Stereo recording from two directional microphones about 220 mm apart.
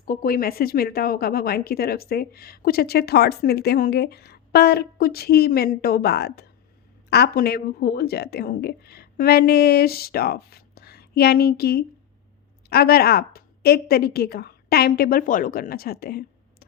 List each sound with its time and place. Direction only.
0.0 s a woman's voice: 40° left (ahead or behind)